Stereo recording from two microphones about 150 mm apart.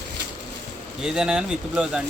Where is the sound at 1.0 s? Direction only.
5° right (ahead or behind).